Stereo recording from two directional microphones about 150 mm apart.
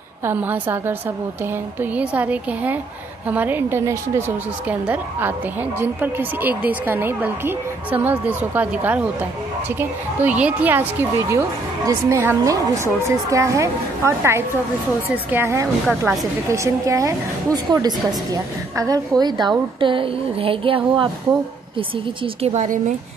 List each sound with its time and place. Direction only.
0.2 s a woman's voice: 15° right (ahead or behind); by 22.9 s 55° right (ahead or behind)